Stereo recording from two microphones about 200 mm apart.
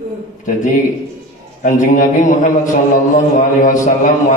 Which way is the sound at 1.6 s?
40° left (ahead or behind).